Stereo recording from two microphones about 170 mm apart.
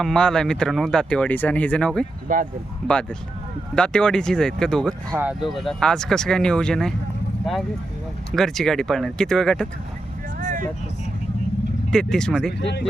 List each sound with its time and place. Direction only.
0.0 s speech: 5° left (ahead or behind)
2.2 s speech: 50° right (ahead or behind)
2.8 s speech: 5° left (ahead or behind)
5.1 s speech: 10° right (ahead or behind)
8.4 s speech: centre (ahead or behind)
11.9 s speech: 5° left (ahead or behind)